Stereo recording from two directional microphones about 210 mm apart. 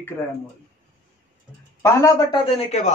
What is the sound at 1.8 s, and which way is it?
Speech, 15° left (ahead or behind).